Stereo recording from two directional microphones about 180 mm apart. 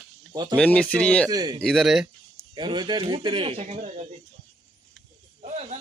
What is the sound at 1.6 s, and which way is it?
Speech, centre (ahead or behind).